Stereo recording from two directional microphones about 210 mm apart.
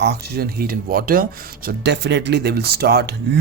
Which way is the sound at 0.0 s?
50° right (ahead or behind).